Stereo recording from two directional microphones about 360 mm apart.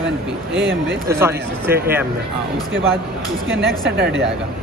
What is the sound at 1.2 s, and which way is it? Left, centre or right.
Speech, centre.